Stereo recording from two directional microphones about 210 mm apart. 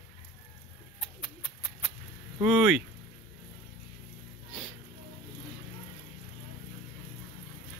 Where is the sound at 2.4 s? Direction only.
Centre (ahead or behind).